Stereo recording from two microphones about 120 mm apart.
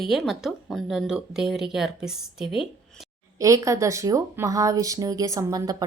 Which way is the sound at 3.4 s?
25° right (ahead or behind).